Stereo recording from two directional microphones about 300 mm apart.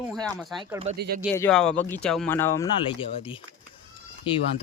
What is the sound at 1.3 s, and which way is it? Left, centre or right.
Speech, centre.